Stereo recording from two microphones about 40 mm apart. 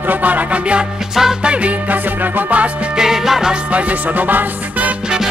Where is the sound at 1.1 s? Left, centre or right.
Centre.